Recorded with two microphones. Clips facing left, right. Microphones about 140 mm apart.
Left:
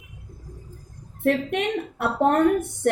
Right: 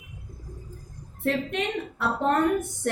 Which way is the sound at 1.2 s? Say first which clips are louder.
Left 4 dB; 60° left (ahead or behind).